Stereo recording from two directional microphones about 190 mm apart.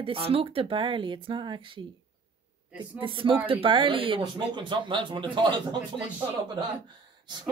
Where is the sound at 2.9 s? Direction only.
25° right (ahead or behind).